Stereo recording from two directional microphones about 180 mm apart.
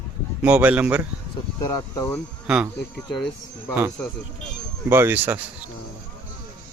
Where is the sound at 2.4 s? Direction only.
5° right (ahead or behind).